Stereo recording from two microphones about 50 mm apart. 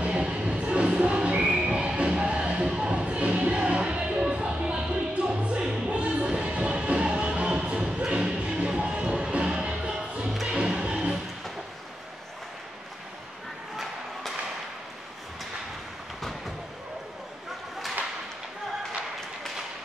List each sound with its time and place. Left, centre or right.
0.0 s music: centre